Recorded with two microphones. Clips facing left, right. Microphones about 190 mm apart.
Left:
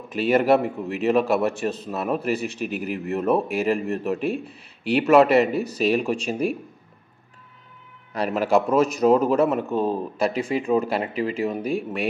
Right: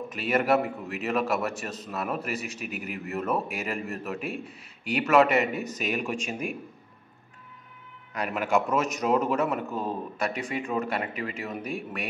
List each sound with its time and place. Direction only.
0.1 s a man's voice: 30° left (ahead or behind)
8.1 s a man's voice: 30° left (ahead or behind)